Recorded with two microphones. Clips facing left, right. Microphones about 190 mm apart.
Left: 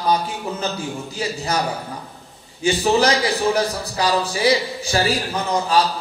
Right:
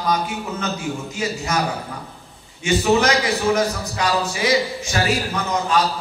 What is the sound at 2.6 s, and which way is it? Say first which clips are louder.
A man's voice: even; 35° left (ahead or behind).